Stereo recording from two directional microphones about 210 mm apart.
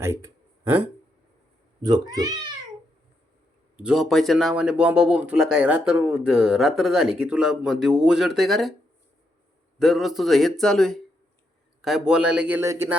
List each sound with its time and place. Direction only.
0.0 s speech: 15° right (ahead or behind)
1.8 s speech: 20° right (ahead or behind)
3.8 s speech: centre (ahead or behind)
9.7 s speech: centre (ahead or behind)